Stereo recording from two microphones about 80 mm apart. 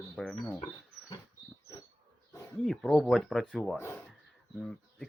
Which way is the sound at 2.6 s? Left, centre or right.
Centre.